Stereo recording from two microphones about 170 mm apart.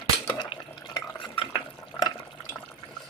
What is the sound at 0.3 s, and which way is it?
Dishes, 25° left (ahead or behind).